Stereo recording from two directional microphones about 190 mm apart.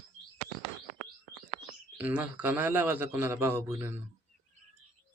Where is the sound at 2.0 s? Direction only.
10° right (ahead or behind).